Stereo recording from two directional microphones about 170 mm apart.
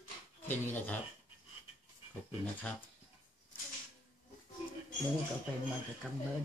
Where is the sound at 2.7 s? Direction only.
10° left (ahead or behind).